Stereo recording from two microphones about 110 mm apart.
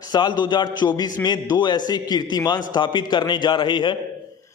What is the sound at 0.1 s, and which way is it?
A man's voice, 45° left (ahead or behind).